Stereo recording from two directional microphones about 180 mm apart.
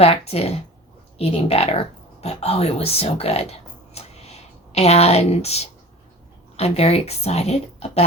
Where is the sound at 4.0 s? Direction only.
35° left (ahead or behind).